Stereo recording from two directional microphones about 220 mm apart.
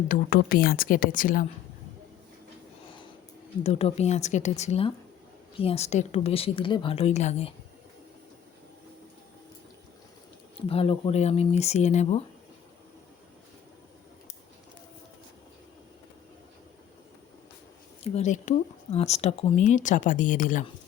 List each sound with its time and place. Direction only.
0.1 s speech: 40° left (ahead or behind)
3.6 s a woman's voice: 30° left (ahead or behind)
10.7 s a woman's voice: 25° left (ahead or behind)
18.0 s speech: 30° left (ahead or behind)